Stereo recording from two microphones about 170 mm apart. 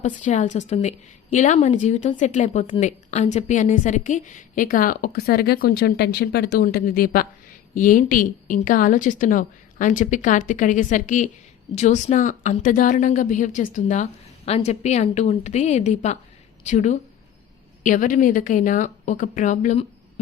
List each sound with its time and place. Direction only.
0.0 s a woman's voice: 50° left (ahead or behind)